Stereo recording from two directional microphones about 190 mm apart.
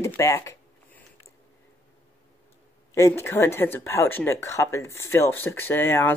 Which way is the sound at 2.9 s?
15° left (ahead or behind).